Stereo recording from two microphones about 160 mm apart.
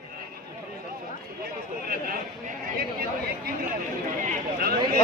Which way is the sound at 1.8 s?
65° right (ahead or behind).